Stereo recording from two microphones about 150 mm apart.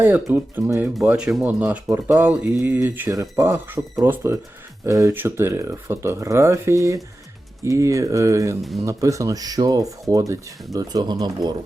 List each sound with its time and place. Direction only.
0.0 s speech: 15° right (ahead or behind)
0.9 s speech: 5° right (ahead or behind); by 11.3 s 30° right (ahead or behind)